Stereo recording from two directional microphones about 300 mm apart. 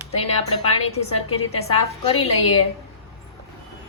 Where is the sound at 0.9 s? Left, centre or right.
Centre.